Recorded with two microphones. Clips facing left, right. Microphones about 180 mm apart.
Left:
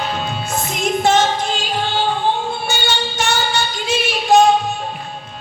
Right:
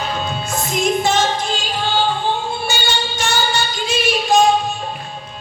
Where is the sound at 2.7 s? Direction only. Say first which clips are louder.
Left 1 dB; 60° left (ahead or behind).